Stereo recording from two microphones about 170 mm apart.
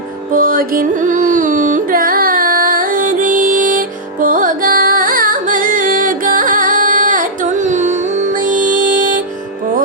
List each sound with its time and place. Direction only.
0.3 s carnatic music: 55° right (ahead or behind)